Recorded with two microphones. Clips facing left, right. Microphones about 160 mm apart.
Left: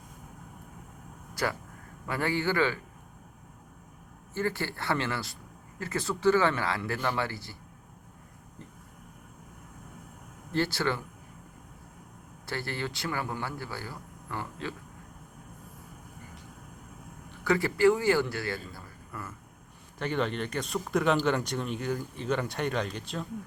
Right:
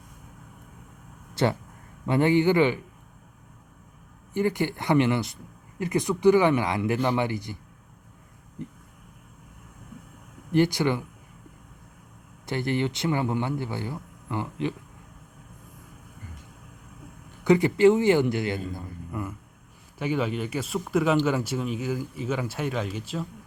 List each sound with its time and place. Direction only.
1.3 s speech: 25° right (ahead or behind)
4.4 s speech: 15° right (ahead or behind)
8.6 s vehicle: 15° right (ahead or behind)
10.5 s speech: 15° right (ahead or behind)
12.5 s speech: 20° right (ahead or behind)
17.4 s a man's voice: 20° right (ahead or behind)
20.0 s speech: 5° right (ahead or behind)